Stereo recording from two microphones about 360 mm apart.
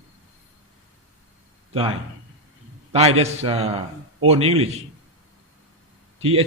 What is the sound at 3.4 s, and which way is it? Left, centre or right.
Speech, centre.